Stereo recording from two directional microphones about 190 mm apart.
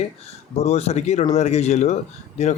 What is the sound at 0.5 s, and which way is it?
Speech, 35° left (ahead or behind).